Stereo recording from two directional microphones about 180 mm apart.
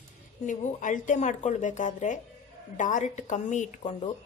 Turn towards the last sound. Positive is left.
turn(degrees=40)  # may be behind; listen again after turning